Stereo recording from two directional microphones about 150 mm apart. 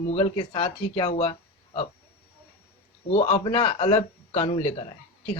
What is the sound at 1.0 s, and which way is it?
Speech, 45° left (ahead or behind).